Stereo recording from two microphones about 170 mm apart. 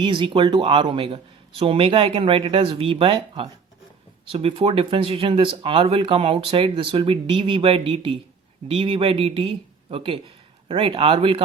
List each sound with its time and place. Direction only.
0.0 s speech: 30° right (ahead or behind)